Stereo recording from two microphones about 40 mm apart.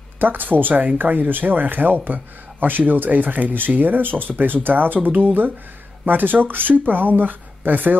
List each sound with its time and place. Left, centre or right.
0.2 s speech: right